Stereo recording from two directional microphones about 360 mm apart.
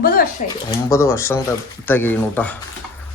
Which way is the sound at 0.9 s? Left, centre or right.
Centre.